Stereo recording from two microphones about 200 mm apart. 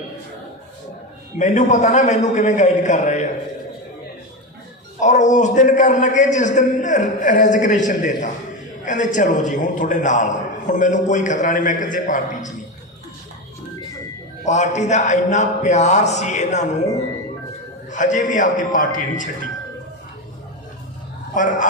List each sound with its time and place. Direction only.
1.4 s a man's voice: 35° left (ahead or behind)
4.9 s a man's voice: 35° left (ahead or behind)
14.4 s a man's voice: 35° left (ahead or behind)
17.9 s a man's voice: 40° left (ahead or behind)
21.3 s a man's voice: 40° left (ahead or behind)